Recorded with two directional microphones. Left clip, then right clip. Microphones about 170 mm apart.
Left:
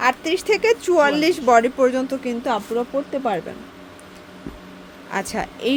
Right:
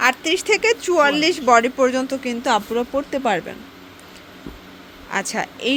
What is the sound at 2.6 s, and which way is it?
Speech, 20° right (ahead or behind).